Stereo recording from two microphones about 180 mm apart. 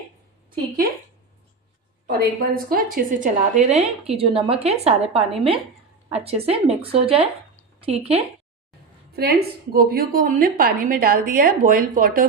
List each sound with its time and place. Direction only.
2.0 s a woman's voice: 55° right (ahead or behind); by 8.2 s 35° right (ahead or behind)
9.1 s a woman's voice: 60° right (ahead or behind)